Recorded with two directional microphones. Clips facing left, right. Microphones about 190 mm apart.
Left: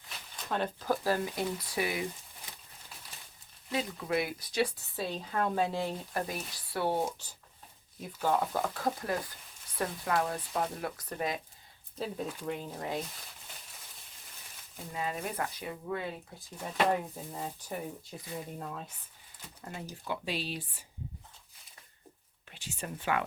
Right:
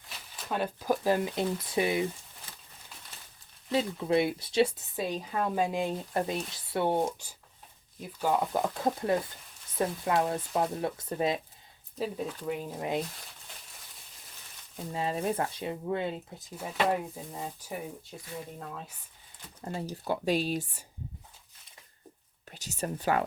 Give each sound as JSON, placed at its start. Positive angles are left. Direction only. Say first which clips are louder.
{"t": 0.4, "sound": "speech", "louder": "right 2 dB", "side_deg": -5}
{"t": 3.7, "sound": "speech", "louder": "right 5 dB", "side_deg": -25}
{"t": 7.9, "sound": "speech", "louder": "right 2 dB", "side_deg": 0}
{"t": 8.3, "sound": "speech", "louder": "right 2 dB", "side_deg": -15}
{"t": 11.9, "sound": "speech", "louder": "right 3 dB", "side_deg": -5}
{"t": 14.9, "sound": "speech", "louder": "right 5 dB", "side_deg": -30}
{"t": 16.6, "sound": "speech", "louder": "right 1 dB", "side_deg": -10}
{"t": 19.6, "sound": "speech", "louder": "right 6 dB", "side_deg": -35}
{"t": 22.4, "sound": "speech", "louder": "right 6 dB", "side_deg": -40}